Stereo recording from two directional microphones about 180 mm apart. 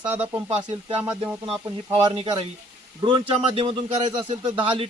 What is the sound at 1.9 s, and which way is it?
A man's voice, 30° right (ahead or behind).